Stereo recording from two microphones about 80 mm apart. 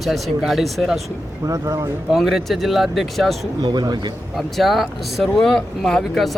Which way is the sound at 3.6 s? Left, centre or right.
Right.